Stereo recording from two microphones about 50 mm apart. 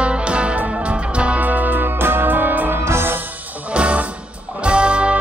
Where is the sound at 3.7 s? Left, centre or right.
Right.